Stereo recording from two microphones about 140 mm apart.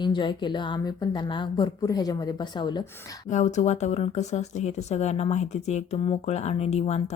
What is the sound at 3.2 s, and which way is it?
Speech, 55° left (ahead or behind).